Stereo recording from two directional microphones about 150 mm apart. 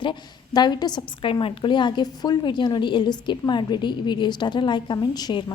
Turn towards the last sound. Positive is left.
turn(degrees=30)  # may be behind; listen again after turning